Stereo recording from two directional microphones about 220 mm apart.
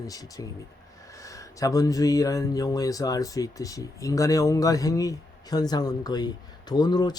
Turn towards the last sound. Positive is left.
turn(degrees=20)  # may be behind; listen again after turning